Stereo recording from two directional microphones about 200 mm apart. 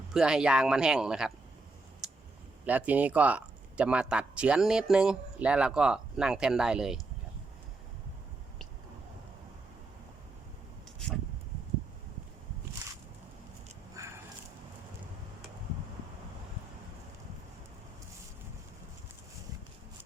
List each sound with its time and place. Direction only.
0.1 s speech: 5° right (ahead or behind)
2.0 s clicking: centre (ahead or behind)
2.6 s speech: 10° right (ahead or behind)
14.0 s a sound: 15° right (ahead or behind)